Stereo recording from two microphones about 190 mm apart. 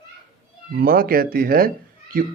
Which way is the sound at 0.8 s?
50° right (ahead or behind).